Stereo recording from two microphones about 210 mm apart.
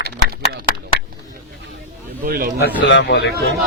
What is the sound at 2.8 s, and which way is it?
Speech, 55° left (ahead or behind).